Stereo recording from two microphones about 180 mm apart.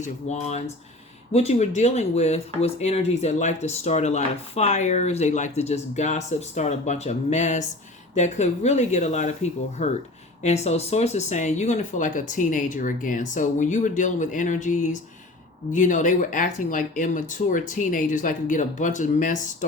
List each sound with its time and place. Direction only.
0.0 s speech: 40° left (ahead or behind)